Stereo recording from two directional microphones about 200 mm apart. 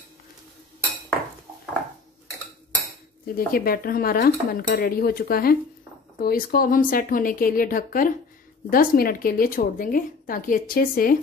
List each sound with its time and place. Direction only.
3.3 s a woman's voice: 45° left (ahead or behind)